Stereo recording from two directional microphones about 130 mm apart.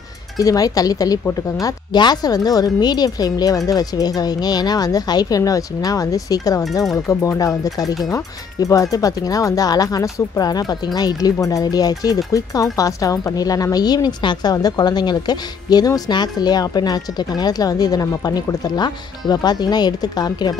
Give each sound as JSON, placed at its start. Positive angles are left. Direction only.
{"t": 0.4, "sound": "a woman's voice", "side_deg": 25}